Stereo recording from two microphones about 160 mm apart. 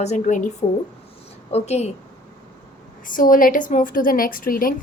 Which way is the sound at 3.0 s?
55° left (ahead or behind).